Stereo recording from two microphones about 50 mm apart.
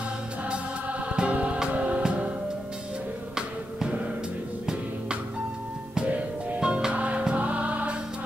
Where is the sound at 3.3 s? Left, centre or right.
Centre.